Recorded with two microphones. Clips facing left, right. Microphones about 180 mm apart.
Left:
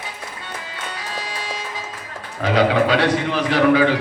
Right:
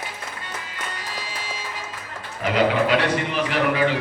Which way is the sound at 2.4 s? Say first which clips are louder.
Left 3 dB; 90° left.